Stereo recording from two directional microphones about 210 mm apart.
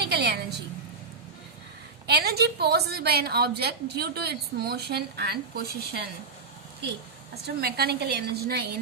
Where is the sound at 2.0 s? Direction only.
50° right (ahead or behind).